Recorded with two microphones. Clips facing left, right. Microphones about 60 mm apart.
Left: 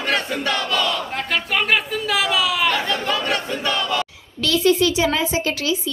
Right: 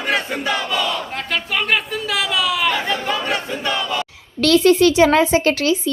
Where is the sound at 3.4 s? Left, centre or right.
Centre.